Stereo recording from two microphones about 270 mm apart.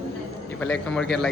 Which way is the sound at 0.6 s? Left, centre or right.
Centre.